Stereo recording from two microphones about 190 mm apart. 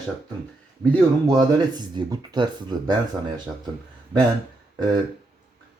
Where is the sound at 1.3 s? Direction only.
20° right (ahead or behind).